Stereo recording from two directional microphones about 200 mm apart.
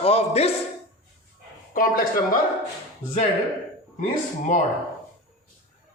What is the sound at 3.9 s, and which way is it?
Speech, 40° left (ahead or behind).